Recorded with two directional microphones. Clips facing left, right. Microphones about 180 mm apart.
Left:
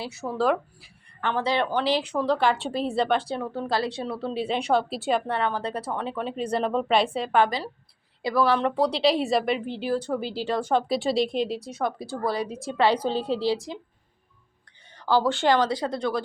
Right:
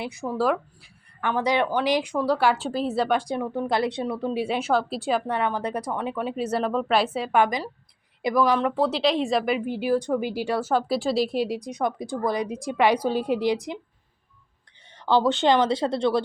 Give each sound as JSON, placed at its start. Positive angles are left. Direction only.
{"t": 0.0, "sound": "a woman's voice", "side_deg": -15}
{"t": 8.8, "sound": "a woman's voice", "side_deg": 0}
{"t": 9.6, "sound": "a woman's voice", "side_deg": -10}
{"t": 14.9, "sound": "a sound", "side_deg": -20}
{"t": 15.3, "sound": "a woman's voice", "side_deg": -20}